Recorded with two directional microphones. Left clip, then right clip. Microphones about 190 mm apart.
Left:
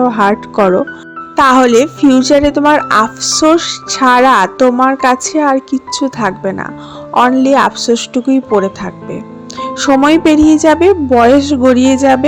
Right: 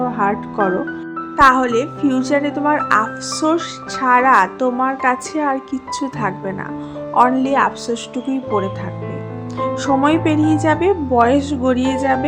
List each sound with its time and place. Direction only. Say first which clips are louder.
0.0 s speech: left 8 dB; 40° left (ahead or behind)